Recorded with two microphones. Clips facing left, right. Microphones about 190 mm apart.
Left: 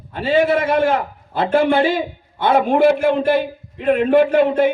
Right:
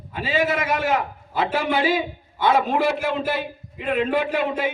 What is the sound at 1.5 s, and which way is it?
A man's voice, 55° left (ahead or behind).